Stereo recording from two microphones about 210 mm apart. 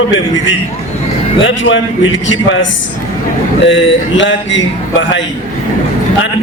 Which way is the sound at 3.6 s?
60° left (ahead or behind).